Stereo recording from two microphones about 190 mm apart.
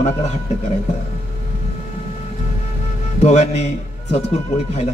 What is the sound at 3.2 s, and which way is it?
A man's voice, 35° left (ahead or behind).